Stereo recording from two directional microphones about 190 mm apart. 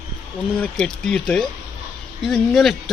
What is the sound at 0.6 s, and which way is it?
Speech, 5° left (ahead or behind).